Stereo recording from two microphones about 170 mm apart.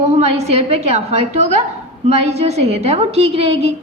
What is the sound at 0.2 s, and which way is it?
A woman's voice, 40° right (ahead or behind).